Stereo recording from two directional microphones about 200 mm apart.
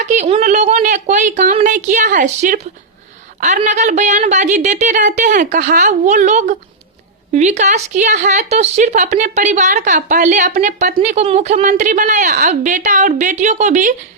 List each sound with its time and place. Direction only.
0.0 s speech: 35° right (ahead or behind)